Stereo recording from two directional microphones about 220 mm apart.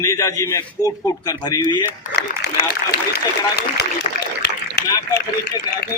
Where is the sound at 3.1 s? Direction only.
45° left (ahead or behind).